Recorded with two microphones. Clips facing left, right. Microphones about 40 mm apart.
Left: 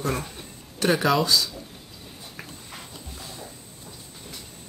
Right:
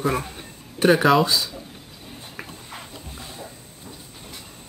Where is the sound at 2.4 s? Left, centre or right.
Centre.